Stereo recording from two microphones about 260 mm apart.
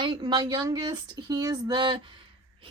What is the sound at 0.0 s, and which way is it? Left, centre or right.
A woman's voice, centre.